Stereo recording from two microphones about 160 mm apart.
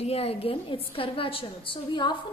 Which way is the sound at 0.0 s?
40° left (ahead or behind).